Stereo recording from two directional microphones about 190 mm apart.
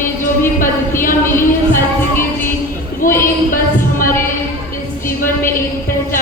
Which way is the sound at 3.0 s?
45° left (ahead or behind).